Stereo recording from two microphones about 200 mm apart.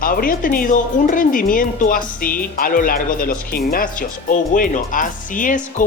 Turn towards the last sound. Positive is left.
turn(degrees=40)  # may be behind; listen again after turning